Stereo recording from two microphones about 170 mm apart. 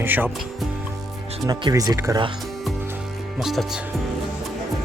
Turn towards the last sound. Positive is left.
turn(degrees=0)  # may be behind; listen again after turning